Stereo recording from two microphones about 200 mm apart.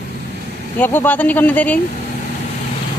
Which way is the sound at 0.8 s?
10° left (ahead or behind).